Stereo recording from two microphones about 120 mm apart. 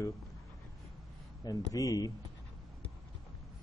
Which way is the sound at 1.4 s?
30° left (ahead or behind).